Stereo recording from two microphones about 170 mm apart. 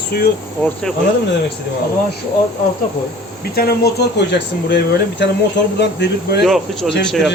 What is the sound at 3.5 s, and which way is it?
Speech, 65° left (ahead or behind).